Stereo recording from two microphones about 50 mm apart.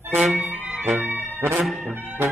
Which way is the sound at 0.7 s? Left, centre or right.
Right.